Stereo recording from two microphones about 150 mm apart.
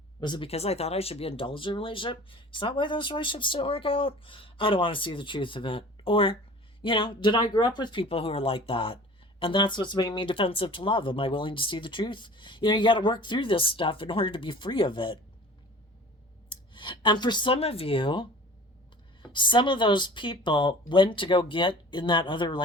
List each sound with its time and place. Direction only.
0.2 s speech: 30° left (ahead or behind)
16.5 s speech: 35° left (ahead or behind)